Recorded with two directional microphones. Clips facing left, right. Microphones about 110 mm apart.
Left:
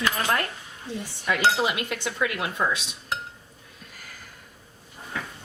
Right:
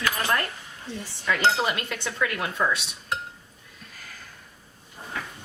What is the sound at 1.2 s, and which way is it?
Dishes, 15° left (ahead or behind).